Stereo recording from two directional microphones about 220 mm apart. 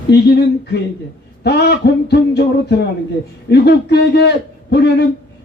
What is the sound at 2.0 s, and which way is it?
A man's voice, 45° left (ahead or behind).